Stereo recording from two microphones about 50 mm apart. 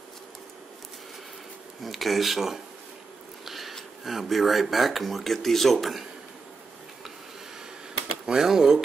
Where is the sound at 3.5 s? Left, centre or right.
Centre.